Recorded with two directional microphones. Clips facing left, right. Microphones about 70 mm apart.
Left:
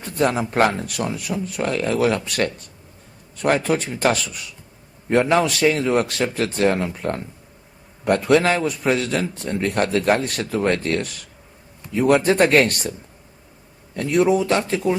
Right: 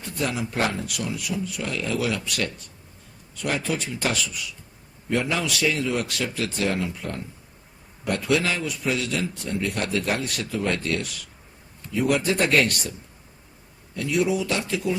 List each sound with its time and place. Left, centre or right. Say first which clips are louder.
0.2 s a man's voice: left 8 dB; left
13.9 s a man's voice: left 6 dB; left